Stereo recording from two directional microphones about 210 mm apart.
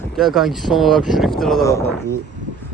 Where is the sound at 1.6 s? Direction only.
15° left (ahead or behind).